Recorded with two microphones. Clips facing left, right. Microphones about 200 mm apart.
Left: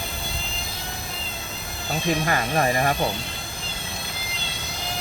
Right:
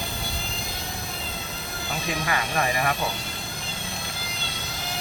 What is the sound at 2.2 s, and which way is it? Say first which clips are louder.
Speech: left 4 dB; 35° left (ahead or behind).